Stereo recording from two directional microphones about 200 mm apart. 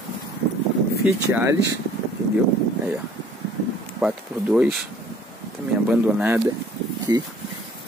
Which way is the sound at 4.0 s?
5° right (ahead or behind).